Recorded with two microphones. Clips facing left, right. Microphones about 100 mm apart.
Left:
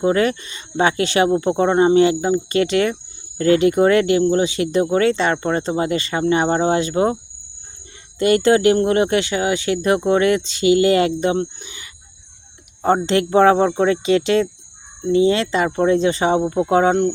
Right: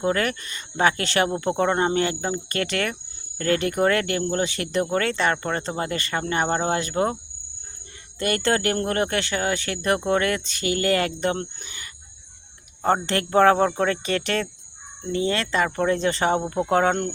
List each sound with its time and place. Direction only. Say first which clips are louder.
0.0 s speech: left 6 dB; 20° left (ahead or behind)
8.2 s speech: left 9 dB; 20° left (ahead or behind)